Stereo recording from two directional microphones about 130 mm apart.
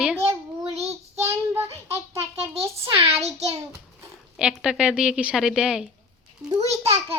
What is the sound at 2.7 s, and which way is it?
Speech, 50° right (ahead or behind).